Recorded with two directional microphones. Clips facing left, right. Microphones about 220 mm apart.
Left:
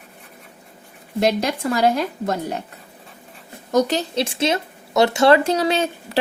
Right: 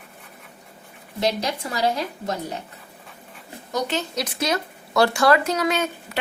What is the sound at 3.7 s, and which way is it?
Speech, 40° left (ahead or behind).